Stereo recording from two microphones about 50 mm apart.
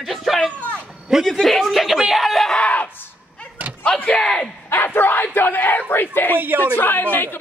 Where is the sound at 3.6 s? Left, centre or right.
Right.